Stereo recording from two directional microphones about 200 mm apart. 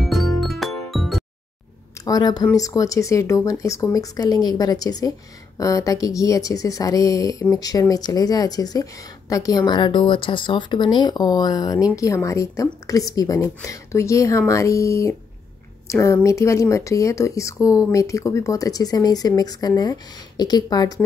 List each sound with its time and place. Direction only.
0.0 s music: centre (ahead or behind)
2.0 s speech: 20° left (ahead or behind)